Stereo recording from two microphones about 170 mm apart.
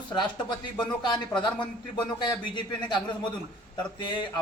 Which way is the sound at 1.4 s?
5° left (ahead or behind).